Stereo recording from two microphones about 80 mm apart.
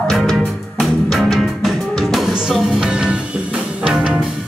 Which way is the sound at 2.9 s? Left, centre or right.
Centre.